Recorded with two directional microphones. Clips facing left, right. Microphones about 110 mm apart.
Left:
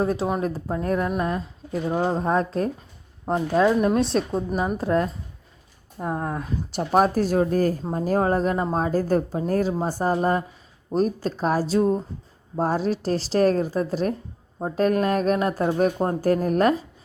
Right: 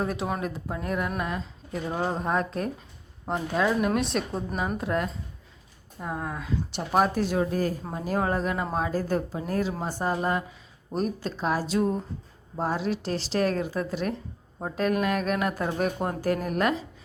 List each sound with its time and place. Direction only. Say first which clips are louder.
0.0 s speech: left 5 dB; 30° left (ahead or behind)
1.9 s speech: left 5 dB; 10° left (ahead or behind)
2.2 s speech: left 5 dB; 30° left (ahead or behind)